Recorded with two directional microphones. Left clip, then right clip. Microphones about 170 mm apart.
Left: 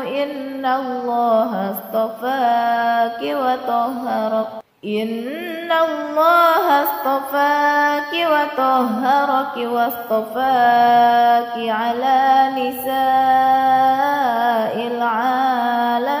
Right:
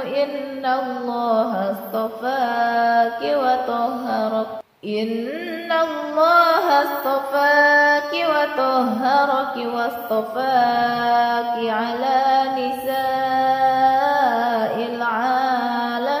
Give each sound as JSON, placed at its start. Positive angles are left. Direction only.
{"t": 2.0, "sound": "music", "side_deg": 30}
{"t": 5.7, "sound": "music", "side_deg": 30}
{"t": 10.4, "sound": "music", "side_deg": 30}